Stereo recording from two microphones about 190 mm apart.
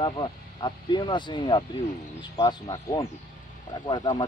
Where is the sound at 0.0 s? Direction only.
25° left (ahead or behind).